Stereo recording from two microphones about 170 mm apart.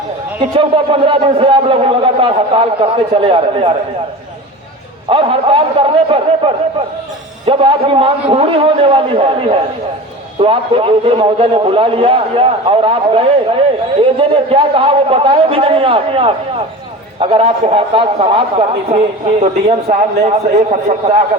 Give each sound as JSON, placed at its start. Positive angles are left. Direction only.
{"t": 0.5, "sound": "a man's voice", "side_deg": -30}
{"t": 5.0, "sound": "a man's voice", "side_deg": -30}
{"t": 19.9, "sound": "a man's voice", "side_deg": -45}